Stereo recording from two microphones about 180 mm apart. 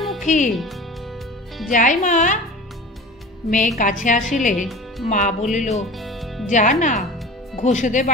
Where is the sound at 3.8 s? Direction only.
45° left (ahead or behind).